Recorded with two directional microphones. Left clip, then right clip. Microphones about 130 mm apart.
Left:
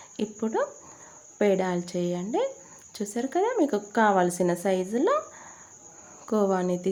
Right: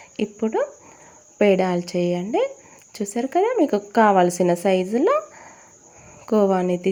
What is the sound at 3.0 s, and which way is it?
A woman's voice, 30° right (ahead or behind).